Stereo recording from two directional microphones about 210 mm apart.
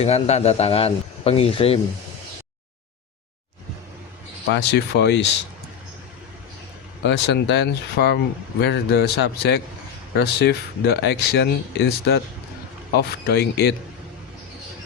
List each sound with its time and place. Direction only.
0.0 s speech: 30° left (ahead or behind)
4.4 s speech: 55° left (ahead or behind)
7.0 s speech: 55° left (ahead or behind)